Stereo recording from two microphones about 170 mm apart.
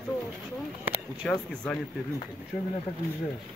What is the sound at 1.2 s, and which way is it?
Speech, 5° left (ahead or behind).